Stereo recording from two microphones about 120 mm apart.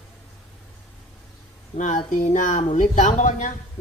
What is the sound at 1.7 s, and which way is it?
Speech, 85° left.